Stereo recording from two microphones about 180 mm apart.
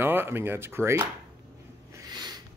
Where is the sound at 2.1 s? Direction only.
25° right (ahead or behind).